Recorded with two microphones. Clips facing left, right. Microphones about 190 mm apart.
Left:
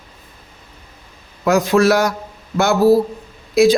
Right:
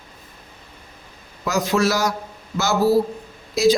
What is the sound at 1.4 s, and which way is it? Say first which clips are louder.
Speech: left 6 dB; 55° left (ahead or behind).